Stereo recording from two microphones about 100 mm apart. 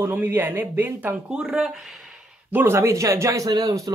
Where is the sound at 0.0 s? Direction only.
20° right (ahead or behind).